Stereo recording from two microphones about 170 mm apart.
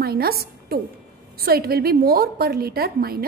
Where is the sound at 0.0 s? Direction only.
65° right (ahead or behind).